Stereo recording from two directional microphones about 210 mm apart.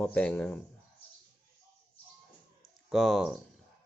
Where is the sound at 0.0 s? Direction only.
5° left (ahead or behind).